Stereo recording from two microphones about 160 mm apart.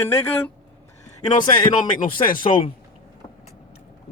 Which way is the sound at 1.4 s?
55° left (ahead or behind).